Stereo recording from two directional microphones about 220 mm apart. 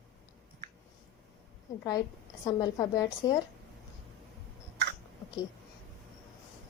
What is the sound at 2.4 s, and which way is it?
Speech, 15° left (ahead or behind).